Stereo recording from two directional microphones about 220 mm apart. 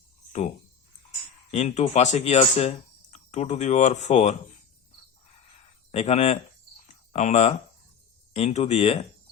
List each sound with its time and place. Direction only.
1.5 s speech: 30° left (ahead or behind)
5.9 s speech: 30° left (ahead or behind)